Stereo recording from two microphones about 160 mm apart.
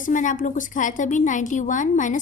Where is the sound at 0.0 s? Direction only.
55° left (ahead or behind).